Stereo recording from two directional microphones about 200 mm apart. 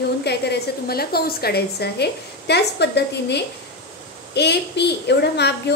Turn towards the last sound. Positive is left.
turn(degrees=55)  # may be behind; listen again after turning